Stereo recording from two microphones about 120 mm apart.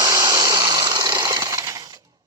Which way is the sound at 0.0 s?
25° right (ahead or behind).